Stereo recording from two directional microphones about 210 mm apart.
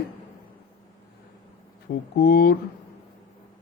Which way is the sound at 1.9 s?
45° left (ahead or behind).